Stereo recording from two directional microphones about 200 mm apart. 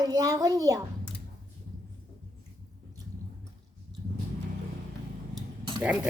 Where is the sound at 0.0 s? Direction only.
20° right (ahead or behind).